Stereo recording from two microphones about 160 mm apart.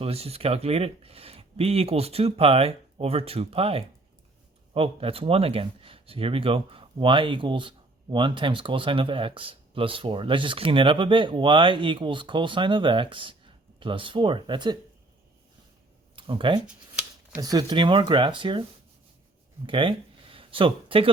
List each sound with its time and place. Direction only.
0.0 s speech: 40° right (ahead or behind)
16.1 s speech: 30° right (ahead or behind)
16.6 s shuffling cards: 10° right (ahead or behind)
17.4 s speech: 25° right (ahead or behind)
19.6 s speech: 30° right (ahead or behind)